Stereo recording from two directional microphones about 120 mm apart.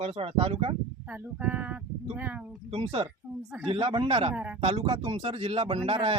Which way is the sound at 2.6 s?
50° right (ahead or behind).